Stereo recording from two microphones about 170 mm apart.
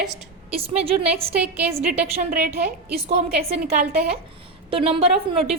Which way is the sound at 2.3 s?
55° right (ahead or behind).